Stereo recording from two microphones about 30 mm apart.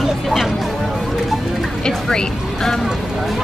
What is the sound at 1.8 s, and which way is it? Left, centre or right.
Speech, left.